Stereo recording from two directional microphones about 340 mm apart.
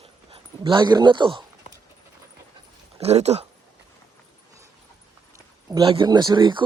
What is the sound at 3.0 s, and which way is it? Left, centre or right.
Speech, centre.